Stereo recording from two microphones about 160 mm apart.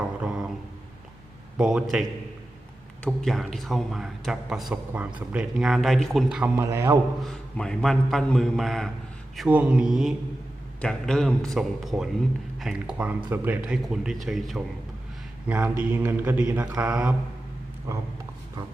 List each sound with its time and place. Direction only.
0.2 s a sound: 5° right (ahead or behind)
1.5 s a man's voice: 5° right (ahead or behind)
6.6 s mantra: 15° right (ahead or behind)
7.2 s a man's voice: 5° left (ahead or behind)
13.3 s mantra: 10° right (ahead or behind)
13.7 s a man's voice: 5° right (ahead or behind)
15.4 s mantra: 10° right (ahead or behind)